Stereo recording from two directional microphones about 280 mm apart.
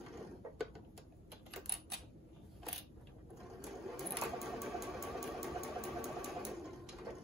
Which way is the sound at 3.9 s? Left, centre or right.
Centre.